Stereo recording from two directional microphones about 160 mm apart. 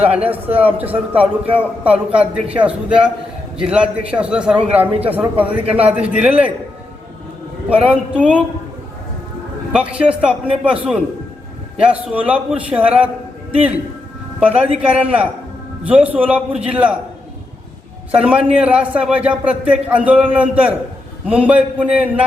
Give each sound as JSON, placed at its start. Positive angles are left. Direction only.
{"t": 0.4, "sound": "a man's voice", "side_deg": -10}
{"t": 7.7, "sound": "a man's voice", "side_deg": -10}
{"t": 9.7, "sound": "a man's voice", "side_deg": -10}
{"t": 14.3, "sound": "a man's voice", "side_deg": -10}
{"t": 18.1, "sound": "a man's voice", "side_deg": -10}